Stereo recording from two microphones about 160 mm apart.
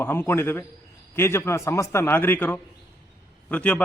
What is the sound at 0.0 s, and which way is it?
A man's voice, 15° left (ahead or behind).